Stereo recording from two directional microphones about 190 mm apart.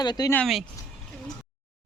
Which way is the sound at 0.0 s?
20° left (ahead or behind).